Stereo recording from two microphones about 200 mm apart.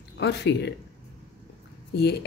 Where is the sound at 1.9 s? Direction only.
55° left (ahead or behind).